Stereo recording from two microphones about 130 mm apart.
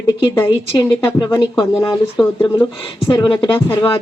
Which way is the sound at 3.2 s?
35° left (ahead or behind).